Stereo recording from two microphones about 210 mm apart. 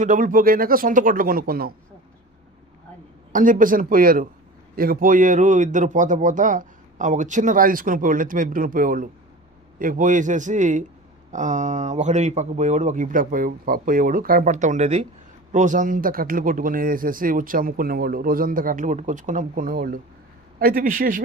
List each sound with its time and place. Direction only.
0.0 s a man's voice: 40° right (ahead or behind)
3.3 s a man's voice: 40° right (ahead or behind)